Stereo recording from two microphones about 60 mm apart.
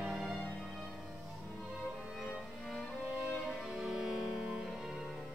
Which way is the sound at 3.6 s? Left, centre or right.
Centre.